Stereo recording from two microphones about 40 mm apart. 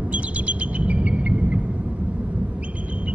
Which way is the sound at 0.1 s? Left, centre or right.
Right.